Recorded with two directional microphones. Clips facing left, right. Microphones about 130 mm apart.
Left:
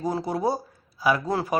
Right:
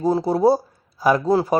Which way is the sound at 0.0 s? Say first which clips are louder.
Right 8 dB; 35° right (ahead or behind).